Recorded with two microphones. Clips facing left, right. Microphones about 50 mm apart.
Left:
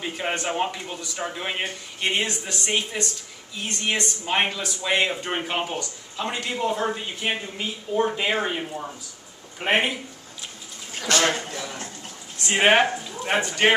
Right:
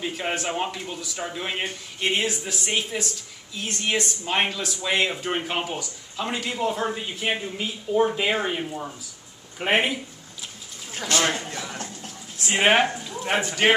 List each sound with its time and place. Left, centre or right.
0.0 s speech: centre
11.5 s speech: centre